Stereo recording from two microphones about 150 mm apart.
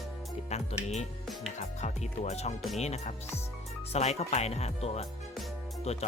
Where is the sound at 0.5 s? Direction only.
45° left (ahead or behind).